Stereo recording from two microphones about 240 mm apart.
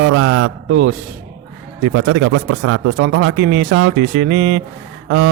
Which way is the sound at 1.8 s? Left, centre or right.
Right.